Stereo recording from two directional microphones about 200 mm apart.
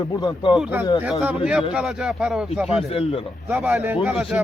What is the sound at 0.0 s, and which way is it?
Speech, 15° left (ahead or behind).